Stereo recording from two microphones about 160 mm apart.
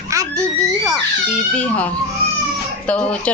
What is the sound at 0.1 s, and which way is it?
Speech, 20° right (ahead or behind).